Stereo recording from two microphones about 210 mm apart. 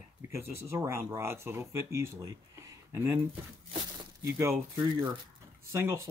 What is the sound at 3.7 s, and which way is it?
Crumpling, 25° right (ahead or behind).